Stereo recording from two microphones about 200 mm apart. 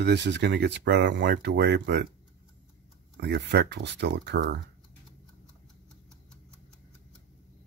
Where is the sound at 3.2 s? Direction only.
55° right (ahead or behind).